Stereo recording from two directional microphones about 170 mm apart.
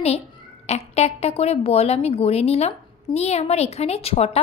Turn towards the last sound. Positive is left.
turn(degrees=35)  # may be behind; listen again after turning